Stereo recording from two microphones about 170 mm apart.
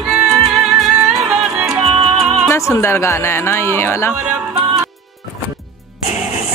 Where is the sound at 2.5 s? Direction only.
15° left (ahead or behind).